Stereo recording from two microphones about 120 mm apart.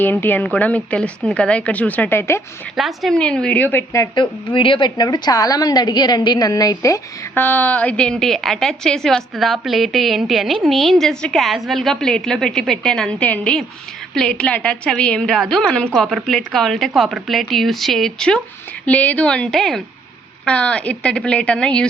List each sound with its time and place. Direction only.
0.0 s a woman's voice: 15° left (ahead or behind)
2.7 s a woman's voice: centre (ahead or behind); by 4.1 s 20° left (ahead or behind)
4.1 s a woman's voice: 40° left (ahead or behind)
7.3 s a woman's voice: 15° left (ahead or behind)